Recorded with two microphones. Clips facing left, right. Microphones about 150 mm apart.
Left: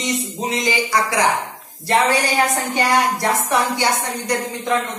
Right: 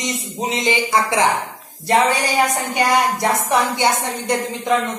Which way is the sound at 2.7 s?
15° right (ahead or behind).